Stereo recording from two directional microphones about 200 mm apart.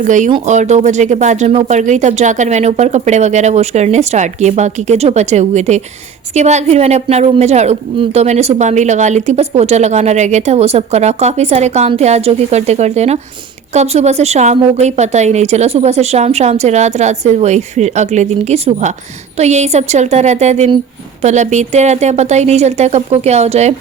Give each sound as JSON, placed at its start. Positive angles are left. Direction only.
{"t": 0.0, "sound": "speech", "side_deg": -40}